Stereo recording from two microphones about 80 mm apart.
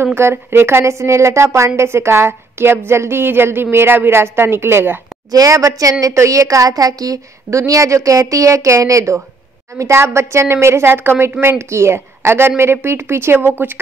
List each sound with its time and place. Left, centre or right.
0.0 s a woman's voice: right
5.3 s a woman's voice: right